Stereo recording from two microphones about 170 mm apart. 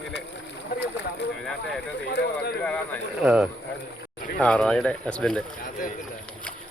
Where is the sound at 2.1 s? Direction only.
90° left.